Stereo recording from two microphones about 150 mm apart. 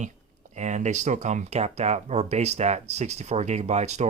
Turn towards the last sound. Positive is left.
turn(degrees=-50)  # may be behind; listen again after turning